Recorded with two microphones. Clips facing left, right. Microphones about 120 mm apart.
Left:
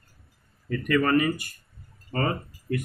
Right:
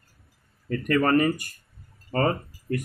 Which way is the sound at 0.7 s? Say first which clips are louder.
Right 1 dB; 40° right (ahead or behind).